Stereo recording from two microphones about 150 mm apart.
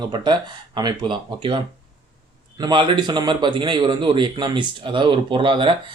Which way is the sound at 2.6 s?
30° right (ahead or behind).